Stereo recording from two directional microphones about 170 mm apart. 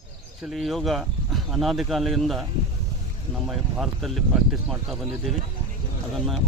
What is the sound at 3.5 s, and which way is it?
Speech, centre (ahead or behind).